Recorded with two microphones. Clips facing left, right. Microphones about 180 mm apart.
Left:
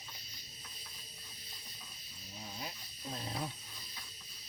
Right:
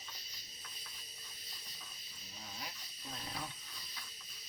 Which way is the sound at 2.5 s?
25° left (ahead or behind).